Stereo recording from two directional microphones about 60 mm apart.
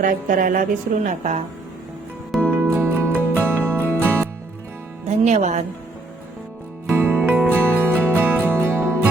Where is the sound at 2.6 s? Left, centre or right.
Right.